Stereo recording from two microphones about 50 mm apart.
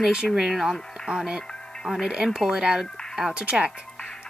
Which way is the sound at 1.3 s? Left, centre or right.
Centre.